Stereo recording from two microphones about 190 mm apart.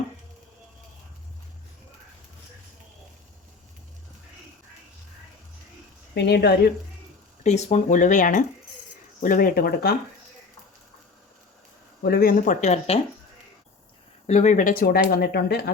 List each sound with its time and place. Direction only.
6.1 s speech: 60° left (ahead or behind)
7.4 s speech: 35° left (ahead or behind); by 9.9 s 55° left (ahead or behind)
12.0 s speech: 50° left (ahead or behind); by 13.0 s 35° left (ahead or behind)
14.3 s speech: 40° left (ahead or behind); by 15.7 s 55° left (ahead or behind)